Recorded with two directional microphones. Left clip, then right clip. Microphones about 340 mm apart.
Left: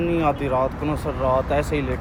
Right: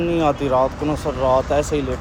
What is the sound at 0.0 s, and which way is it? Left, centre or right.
Speech, centre.